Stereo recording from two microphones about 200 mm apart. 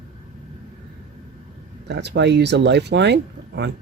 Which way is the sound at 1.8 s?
60° right (ahead or behind).